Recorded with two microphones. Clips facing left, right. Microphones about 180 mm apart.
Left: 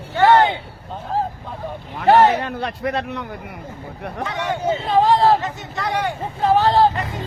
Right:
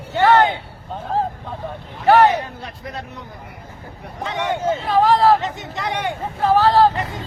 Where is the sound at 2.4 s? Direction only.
70° left (ahead or behind).